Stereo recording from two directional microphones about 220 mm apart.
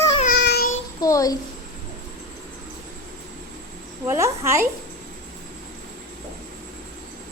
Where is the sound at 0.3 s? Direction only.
45° left (ahead or behind).